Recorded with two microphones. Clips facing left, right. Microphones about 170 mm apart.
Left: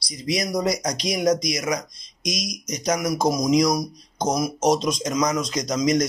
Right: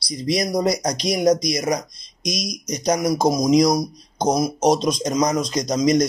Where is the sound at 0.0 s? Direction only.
35° right (ahead or behind).